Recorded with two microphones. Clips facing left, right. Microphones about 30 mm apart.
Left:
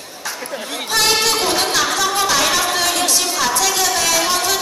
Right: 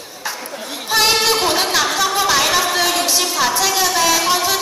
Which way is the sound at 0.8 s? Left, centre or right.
Centre.